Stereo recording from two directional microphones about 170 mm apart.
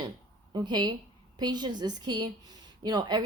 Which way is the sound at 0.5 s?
25° right (ahead or behind).